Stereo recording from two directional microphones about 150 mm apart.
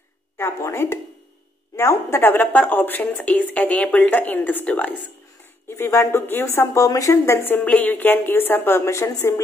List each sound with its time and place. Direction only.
0.4 s a woman's voice: 15° left (ahead or behind)